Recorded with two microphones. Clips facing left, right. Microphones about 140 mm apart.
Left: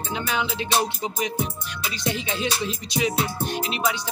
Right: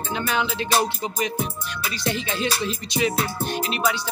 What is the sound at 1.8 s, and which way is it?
Music, 15° left (ahead or behind).